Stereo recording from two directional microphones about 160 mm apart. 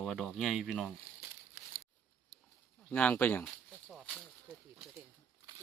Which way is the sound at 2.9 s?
10° left (ahead or behind).